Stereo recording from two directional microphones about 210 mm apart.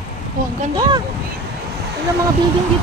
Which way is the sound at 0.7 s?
20° right (ahead or behind).